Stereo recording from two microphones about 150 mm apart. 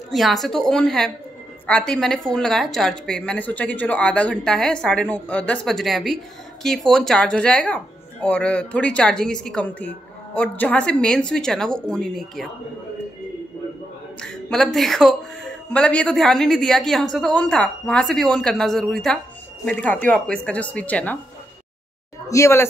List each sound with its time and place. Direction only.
0.1 s speech: centre (ahead or behind)
14.2 s a woman's voice: 5° left (ahead or behind)
22.3 s speech: 20° left (ahead or behind)